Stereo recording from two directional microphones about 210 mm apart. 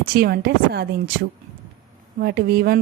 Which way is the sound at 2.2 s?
50° right (ahead or behind).